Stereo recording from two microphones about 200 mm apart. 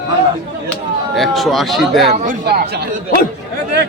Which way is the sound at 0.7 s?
Centre (ahead or behind).